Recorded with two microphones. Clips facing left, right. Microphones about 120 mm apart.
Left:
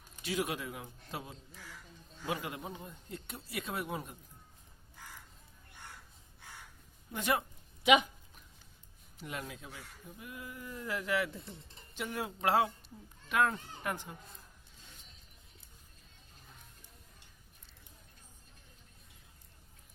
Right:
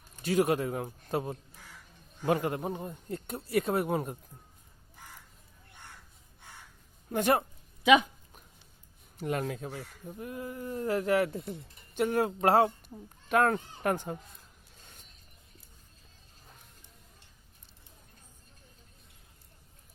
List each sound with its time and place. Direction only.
0.2 s speech: 45° right (ahead or behind)
7.1 s speech: 45° right (ahead or behind)
9.1 s speech: 50° right (ahead or behind)
14.8 s vehicle: 50° right (ahead or behind)